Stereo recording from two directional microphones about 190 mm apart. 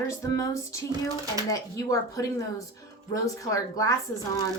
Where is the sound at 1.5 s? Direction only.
15° left (ahead or behind).